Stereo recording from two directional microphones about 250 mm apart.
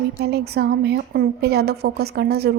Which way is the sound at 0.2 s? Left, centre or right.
Right.